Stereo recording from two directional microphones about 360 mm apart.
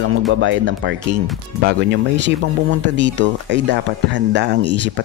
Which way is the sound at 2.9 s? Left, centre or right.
Right.